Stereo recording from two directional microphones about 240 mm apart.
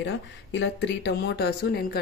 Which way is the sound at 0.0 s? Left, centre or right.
Left.